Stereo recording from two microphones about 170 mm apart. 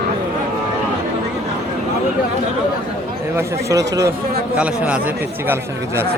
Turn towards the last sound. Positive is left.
turn(degrees=-10)  # may be behind; listen again after turning